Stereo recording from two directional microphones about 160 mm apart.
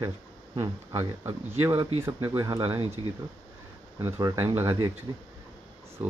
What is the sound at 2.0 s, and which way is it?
Speech, 15° right (ahead or behind).